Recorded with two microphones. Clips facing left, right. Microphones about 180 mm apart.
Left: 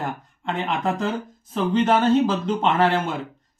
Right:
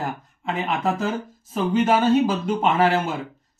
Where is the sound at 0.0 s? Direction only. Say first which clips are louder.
Even; 5° right (ahead or behind).